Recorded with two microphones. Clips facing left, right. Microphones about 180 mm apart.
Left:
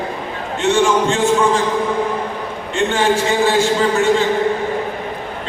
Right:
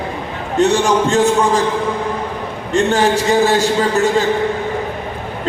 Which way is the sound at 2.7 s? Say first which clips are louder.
Right 2 dB; 40° right (ahead or behind).